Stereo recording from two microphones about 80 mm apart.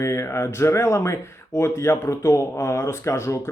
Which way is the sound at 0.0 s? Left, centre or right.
Left.